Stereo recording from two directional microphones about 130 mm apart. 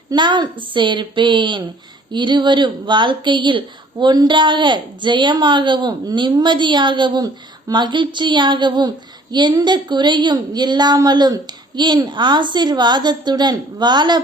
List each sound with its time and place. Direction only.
0.1 s a woman's voice: 35° right (ahead or behind)